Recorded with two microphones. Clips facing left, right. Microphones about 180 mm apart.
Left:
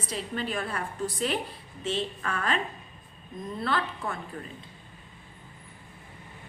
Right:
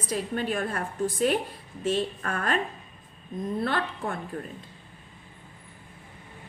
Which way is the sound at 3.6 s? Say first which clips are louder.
Left 2 dB; 50° right (ahead or behind).